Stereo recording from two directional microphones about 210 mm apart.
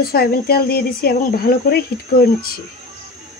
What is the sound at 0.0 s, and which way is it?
Speech, 45° left (ahead or behind).